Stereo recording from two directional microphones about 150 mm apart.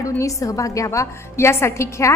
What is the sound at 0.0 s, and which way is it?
A woman's voice, 20° left (ahead or behind).